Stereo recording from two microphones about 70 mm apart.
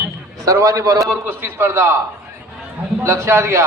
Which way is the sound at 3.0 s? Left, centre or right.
Right.